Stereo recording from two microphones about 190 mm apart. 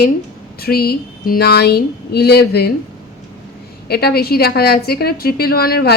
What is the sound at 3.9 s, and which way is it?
A woman's voice, 55° left (ahead or behind).